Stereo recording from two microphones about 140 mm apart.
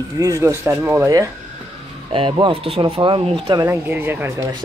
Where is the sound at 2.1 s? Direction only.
40° right (ahead or behind).